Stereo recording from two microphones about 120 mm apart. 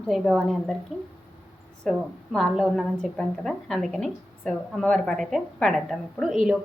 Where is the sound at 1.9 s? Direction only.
Centre (ahead or behind).